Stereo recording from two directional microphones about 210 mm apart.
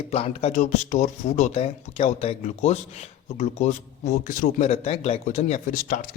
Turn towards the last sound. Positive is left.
turn(degrees=40)  # may be behind; listen again after turning